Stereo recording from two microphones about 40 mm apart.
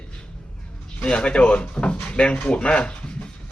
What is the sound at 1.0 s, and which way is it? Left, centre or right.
Speech, left.